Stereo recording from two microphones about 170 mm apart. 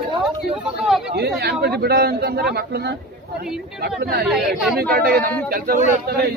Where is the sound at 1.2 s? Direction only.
75° right (ahead or behind).